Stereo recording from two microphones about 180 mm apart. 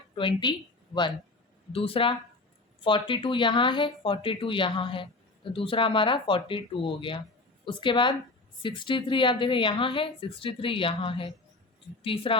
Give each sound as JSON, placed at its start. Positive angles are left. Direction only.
{"t": 0.2, "sound": "speech", "side_deg": 25}
{"t": 1.7, "sound": "speech", "side_deg": 30}